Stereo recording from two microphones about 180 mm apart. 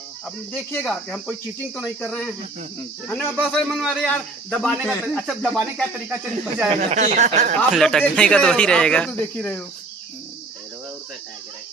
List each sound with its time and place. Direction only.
0.3 s a man's voice: 5° left (ahead or behind)
6.7 s speech: 40° right (ahead or behind)
7.8 s a man's voice: 5° left (ahead or behind)
9.2 s cricket: 10° left (ahead or behind)